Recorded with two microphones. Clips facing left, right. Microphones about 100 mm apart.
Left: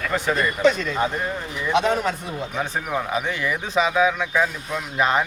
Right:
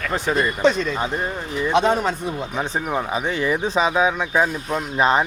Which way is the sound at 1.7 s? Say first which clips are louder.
Right 2 dB; 30° right (ahead or behind).